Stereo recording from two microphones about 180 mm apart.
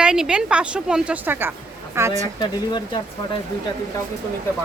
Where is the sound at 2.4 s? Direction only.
25° left (ahead or behind).